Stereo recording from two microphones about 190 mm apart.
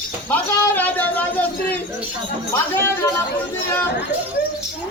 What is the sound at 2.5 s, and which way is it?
Speech, 10° left (ahead or behind).